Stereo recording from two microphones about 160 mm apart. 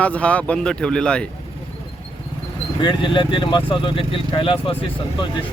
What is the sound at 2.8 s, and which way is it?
Speech, 30° left (ahead or behind).